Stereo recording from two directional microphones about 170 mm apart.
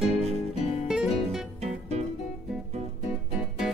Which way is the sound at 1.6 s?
40° right (ahead or behind).